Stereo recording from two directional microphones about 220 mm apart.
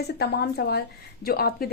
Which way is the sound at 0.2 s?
45° left (ahead or behind).